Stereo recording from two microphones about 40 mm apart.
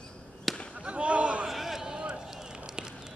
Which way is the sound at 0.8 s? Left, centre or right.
Right.